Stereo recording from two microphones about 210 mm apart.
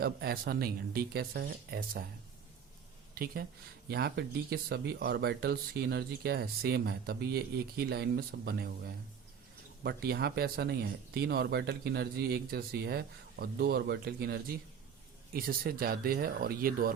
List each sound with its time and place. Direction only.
0.0 s speech: 45° right (ahead or behind)
3.8 s speech: 50° right (ahead or behind)
9.8 s speech: 50° right (ahead or behind)